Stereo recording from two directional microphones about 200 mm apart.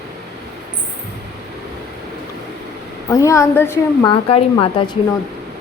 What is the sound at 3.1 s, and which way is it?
Speech, 15° left (ahead or behind).